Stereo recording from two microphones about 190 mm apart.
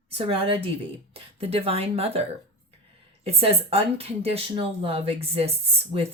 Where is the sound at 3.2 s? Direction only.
30° right (ahead or behind).